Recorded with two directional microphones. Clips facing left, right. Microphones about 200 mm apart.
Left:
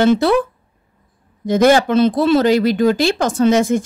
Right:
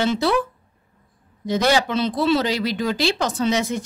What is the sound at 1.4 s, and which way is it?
A woman's voice, 50° left (ahead or behind).